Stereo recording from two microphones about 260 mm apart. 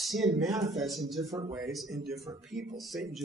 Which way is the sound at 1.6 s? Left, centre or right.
Centre.